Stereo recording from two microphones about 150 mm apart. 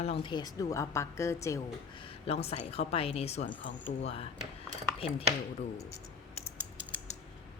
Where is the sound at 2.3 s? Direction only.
45° left (ahead or behind).